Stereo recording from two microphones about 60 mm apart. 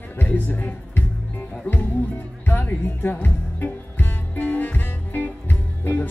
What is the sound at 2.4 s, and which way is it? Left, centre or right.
Music, left.